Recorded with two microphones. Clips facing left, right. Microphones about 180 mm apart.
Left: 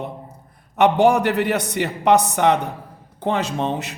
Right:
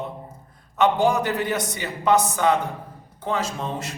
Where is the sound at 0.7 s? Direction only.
70° left (ahead or behind).